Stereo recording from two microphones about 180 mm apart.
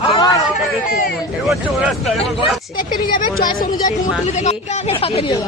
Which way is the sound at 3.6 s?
45° left (ahead or behind).